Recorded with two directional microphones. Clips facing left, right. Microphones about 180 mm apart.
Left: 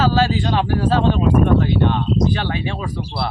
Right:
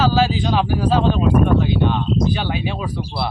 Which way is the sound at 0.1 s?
5° right (ahead or behind).